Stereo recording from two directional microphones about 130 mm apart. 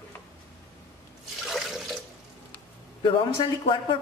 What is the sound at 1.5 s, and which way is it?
Water, centre (ahead or behind).